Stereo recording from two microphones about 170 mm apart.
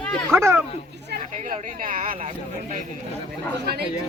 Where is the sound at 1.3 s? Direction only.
45° right (ahead or behind).